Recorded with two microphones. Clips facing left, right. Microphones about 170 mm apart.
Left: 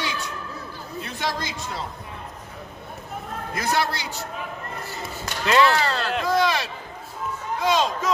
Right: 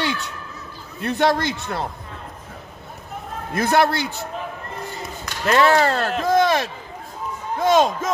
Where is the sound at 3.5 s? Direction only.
60° right (ahead or behind).